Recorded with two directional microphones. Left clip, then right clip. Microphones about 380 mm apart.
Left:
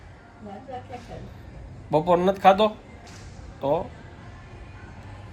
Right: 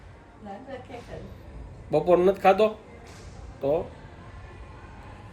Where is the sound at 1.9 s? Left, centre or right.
Centre.